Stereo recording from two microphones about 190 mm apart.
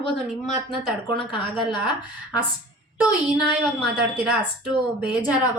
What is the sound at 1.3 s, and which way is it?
Speech, 25° left (ahead or behind).